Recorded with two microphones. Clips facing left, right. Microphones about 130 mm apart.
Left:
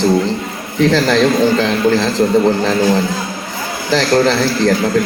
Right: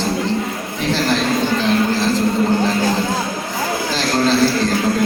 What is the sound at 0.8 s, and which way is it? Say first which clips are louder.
A man's voice: left 7 dB; 90° left.